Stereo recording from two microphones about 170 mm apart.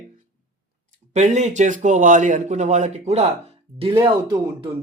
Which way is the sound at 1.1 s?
45° right (ahead or behind).